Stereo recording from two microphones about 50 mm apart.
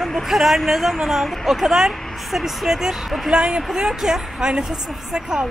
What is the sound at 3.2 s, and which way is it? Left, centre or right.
A woman's voice, centre.